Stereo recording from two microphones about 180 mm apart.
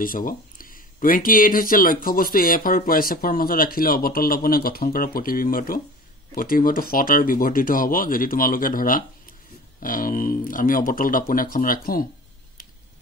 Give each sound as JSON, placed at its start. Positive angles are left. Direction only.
{"t": 0.0, "sound": "speech", "side_deg": 50}